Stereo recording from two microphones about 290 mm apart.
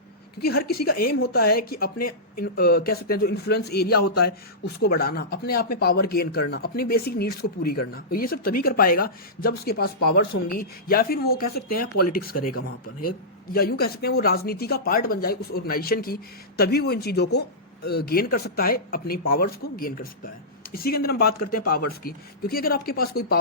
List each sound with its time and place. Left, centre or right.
0.3 s speech: left